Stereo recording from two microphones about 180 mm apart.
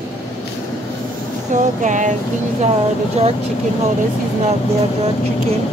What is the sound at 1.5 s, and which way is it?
Speech, 45° right (ahead or behind).